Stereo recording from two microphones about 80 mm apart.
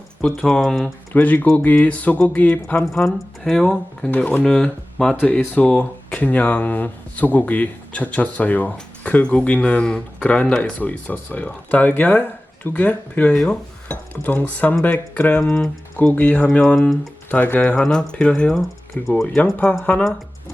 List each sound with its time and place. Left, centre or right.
0.2 s speech: centre
1.1 s speech: left
2.8 s speech: centre
4.1 s speech: centre
13.3 s speech: centre
13.8 s speech: left
15.4 s speech: centre
16.1 s speech: left; by 19.4 s centre
19.8 s speech: centre